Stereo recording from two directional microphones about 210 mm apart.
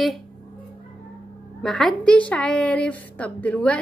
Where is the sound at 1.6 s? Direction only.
Centre (ahead or behind).